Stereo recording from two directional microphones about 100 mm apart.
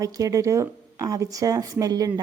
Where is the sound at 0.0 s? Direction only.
35° right (ahead or behind).